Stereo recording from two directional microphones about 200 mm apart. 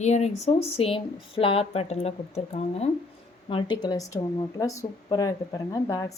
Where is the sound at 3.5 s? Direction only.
25° left (ahead or behind).